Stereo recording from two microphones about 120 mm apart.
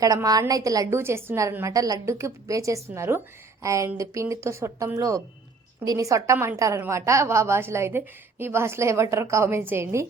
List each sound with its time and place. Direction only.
0.0 s a woman's voice: 30° right (ahead or behind)